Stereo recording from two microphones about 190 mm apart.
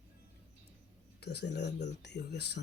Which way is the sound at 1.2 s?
60° left (ahead or behind).